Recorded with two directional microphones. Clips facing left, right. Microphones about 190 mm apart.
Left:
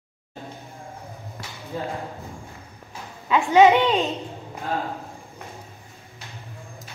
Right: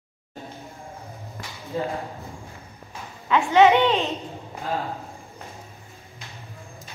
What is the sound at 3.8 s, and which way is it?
Speech, centre (ahead or behind).